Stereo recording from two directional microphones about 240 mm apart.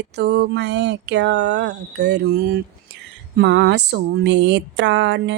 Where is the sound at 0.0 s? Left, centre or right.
Right.